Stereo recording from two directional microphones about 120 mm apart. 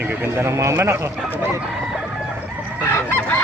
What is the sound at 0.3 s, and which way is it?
Speech, 20° right (ahead or behind).